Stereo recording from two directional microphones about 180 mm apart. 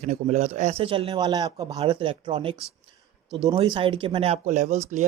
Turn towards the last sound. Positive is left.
turn(degrees=-40)  # may be behind; listen again after turning